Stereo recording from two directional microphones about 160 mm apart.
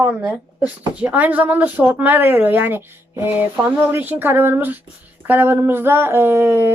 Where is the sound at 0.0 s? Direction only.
5° right (ahead or behind).